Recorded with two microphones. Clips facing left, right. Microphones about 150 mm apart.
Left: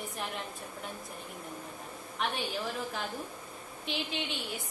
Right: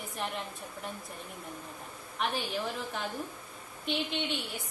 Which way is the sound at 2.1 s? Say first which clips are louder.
Right 1 dB; centre (ahead or behind).